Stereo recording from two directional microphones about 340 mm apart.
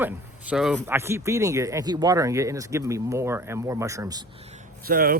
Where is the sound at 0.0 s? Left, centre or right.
Centre.